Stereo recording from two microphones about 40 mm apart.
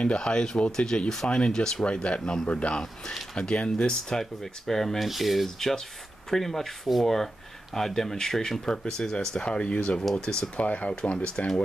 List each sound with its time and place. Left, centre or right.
0.0 s speech: left
4.2 s speech: centre; by 9.9 s left
10.3 s speech: left